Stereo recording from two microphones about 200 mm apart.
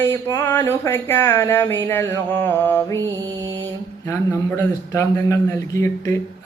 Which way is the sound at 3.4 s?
20° right (ahead or behind).